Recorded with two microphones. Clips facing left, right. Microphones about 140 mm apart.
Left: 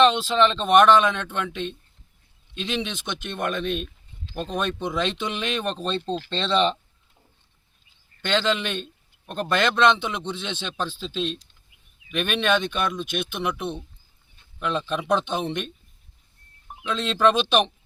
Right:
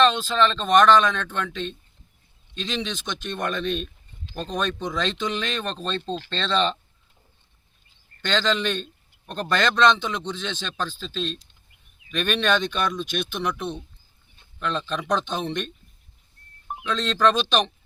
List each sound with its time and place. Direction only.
0.0 s speech: 15° left (ahead or behind)
8.2 s speech: 10° left (ahead or behind)
16.9 s speech: 10° left (ahead or behind)